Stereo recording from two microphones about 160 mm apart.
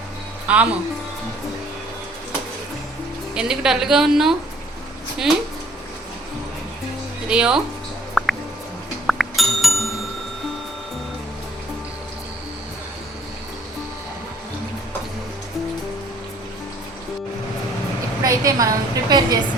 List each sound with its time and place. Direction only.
0.4 s speech: 10° right (ahead or behind)
3.3 s a woman's voice: 5° right (ahead or behind)
7.3 s speech: 5° right (ahead or behind)
8.2 s music: centre (ahead or behind)
18.2 s a woman's voice: 20° right (ahead or behind)